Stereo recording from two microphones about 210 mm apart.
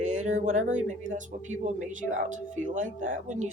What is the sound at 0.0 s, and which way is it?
Speech, 35° right (ahead or behind).